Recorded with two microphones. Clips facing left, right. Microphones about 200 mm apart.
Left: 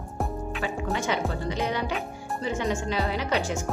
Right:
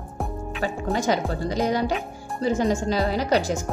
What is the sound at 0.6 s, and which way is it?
Speech, 40° right (ahead or behind).